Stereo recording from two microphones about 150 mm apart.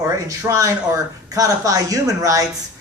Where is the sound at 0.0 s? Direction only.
20° right (ahead or behind).